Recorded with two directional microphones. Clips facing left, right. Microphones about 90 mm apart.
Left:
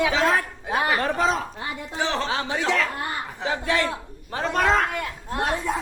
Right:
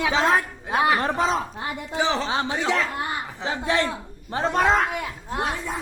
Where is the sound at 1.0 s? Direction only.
25° right (ahead or behind).